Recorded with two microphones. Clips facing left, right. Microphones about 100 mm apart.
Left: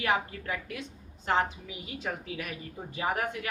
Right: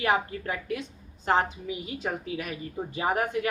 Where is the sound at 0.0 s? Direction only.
35° right (ahead or behind).